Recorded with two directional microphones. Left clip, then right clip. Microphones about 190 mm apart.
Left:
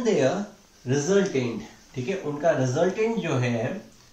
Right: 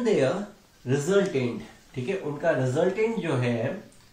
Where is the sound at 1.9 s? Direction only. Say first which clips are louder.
Left 1 dB; 10° left (ahead or behind).